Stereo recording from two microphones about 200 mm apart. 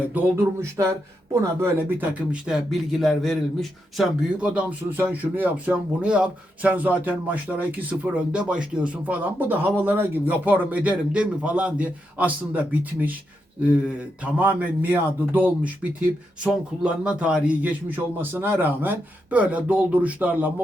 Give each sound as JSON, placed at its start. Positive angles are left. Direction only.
{"t": 0.1, "sound": "speech", "side_deg": -10}
{"t": 14.3, "sound": "speech", "side_deg": -10}